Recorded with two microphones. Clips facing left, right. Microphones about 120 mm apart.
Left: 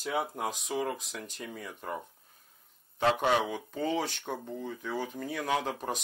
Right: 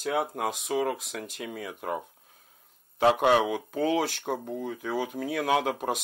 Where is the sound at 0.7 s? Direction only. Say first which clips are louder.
Right 7 dB; 70° right (ahead or behind).